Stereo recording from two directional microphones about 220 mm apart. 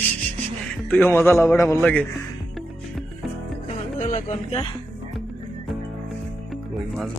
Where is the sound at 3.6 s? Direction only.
35° left (ahead or behind).